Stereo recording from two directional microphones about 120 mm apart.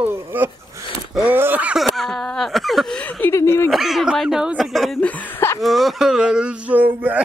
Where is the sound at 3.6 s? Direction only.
Centre (ahead or behind).